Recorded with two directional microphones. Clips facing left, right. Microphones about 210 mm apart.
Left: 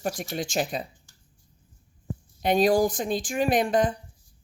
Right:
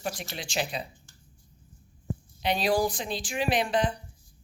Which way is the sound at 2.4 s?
45° left (ahead or behind).